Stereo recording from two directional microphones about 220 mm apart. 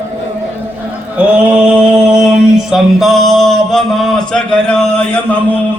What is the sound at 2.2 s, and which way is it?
Mantra, centre (ahead or behind).